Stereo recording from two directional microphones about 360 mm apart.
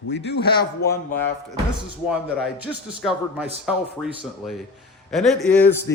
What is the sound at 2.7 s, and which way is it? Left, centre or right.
A man's voice, centre.